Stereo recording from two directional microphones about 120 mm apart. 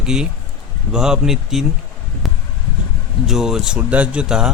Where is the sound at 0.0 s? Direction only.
5° right (ahead or behind).